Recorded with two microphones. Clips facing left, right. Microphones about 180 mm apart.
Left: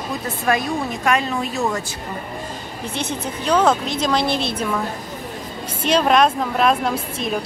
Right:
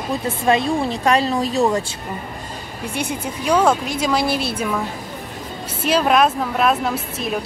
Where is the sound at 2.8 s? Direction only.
10° right (ahead or behind).